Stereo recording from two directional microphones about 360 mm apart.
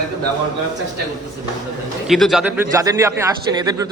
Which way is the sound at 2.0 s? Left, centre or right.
Centre.